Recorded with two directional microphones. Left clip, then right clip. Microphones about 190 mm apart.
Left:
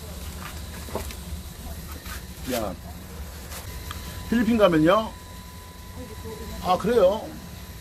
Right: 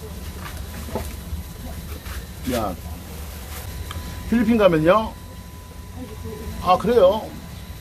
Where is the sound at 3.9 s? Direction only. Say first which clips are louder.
Right 3 dB; 5° left (ahead or behind).